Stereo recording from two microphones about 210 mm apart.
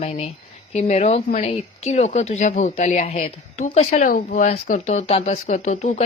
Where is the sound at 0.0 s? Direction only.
30° left (ahead or behind).